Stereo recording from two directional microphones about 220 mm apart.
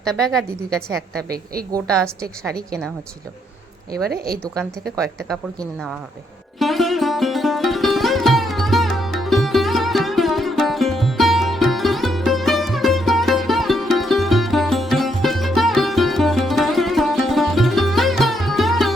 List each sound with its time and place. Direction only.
0.0 s a woman's voice: centre (ahead or behind)
4.4 s a woman's voice: centre (ahead or behind)
6.6 s sitar: centre (ahead or behind)